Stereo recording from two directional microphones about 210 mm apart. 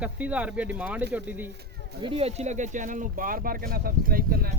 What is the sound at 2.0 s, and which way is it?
Speech, 25° right (ahead or behind).